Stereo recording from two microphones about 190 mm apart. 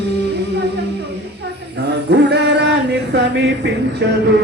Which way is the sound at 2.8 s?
65° right (ahead or behind).